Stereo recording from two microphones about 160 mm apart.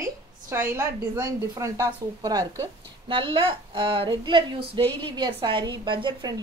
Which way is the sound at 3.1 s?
30° right (ahead or behind).